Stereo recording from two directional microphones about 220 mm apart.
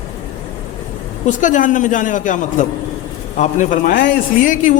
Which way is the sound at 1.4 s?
35° left (ahead or behind).